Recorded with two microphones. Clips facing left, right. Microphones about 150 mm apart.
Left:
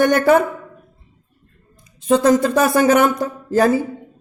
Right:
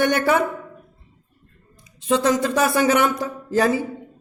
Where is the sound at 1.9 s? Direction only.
45° left (ahead or behind).